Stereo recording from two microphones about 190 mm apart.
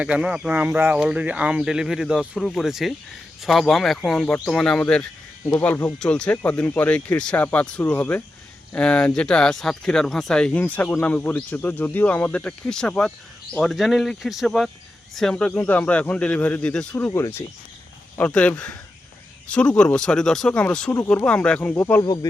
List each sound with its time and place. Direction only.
0.0 s speech: 5° right (ahead or behind); by 22.0 s 10° left (ahead or behind)
22.0 s speech: 20° left (ahead or behind)